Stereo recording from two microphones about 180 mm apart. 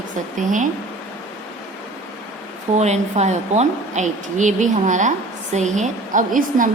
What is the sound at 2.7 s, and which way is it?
A woman's voice, 40° right (ahead or behind).